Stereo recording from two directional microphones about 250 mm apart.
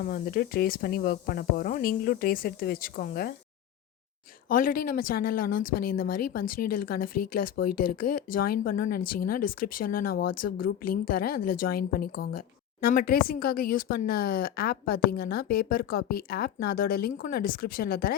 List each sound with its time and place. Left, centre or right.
0.0 s speech: left
4.4 s speech: left